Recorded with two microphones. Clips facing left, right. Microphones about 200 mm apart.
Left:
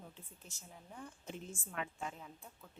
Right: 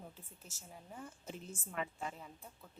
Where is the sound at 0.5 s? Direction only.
5° right (ahead or behind).